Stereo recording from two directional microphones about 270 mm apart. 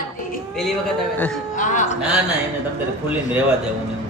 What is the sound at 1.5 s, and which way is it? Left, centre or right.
Speech, left.